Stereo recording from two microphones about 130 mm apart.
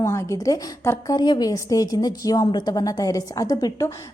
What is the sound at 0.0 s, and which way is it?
A woman's voice, 20° left (ahead or behind).